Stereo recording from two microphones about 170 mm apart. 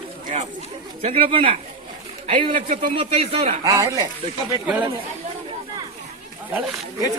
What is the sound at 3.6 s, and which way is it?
Speech, 20° right (ahead or behind).